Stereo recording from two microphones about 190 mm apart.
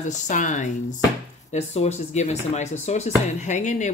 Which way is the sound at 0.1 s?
40° left (ahead or behind).